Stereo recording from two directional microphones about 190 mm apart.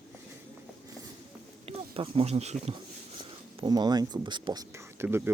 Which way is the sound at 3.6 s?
20° right (ahead or behind).